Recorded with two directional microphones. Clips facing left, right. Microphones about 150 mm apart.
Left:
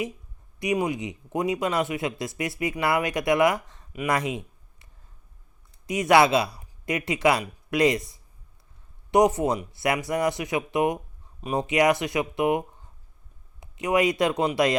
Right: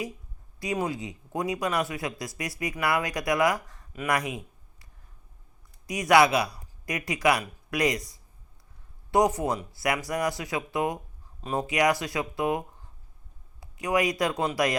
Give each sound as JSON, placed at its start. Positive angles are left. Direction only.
{"t": 0.6, "sound": "speech", "side_deg": 20}
{"t": 4.0, "sound": "a sound", "side_deg": 25}
{"t": 5.8, "sound": "speech", "side_deg": 25}
{"t": 11.6, "sound": "speech", "side_deg": 25}